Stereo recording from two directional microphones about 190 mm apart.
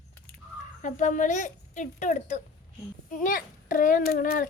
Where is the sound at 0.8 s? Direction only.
40° left (ahead or behind).